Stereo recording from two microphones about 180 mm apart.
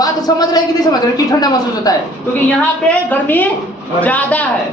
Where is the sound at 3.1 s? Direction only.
10° left (ahead or behind).